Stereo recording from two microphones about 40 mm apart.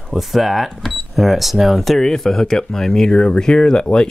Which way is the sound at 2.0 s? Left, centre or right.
Centre.